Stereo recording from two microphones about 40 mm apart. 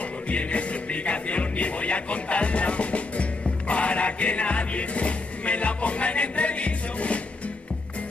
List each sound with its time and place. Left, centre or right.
0.3 s music: left